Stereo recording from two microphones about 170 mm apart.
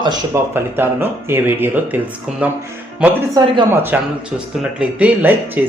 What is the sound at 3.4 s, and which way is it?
Speech, 20° right (ahead or behind).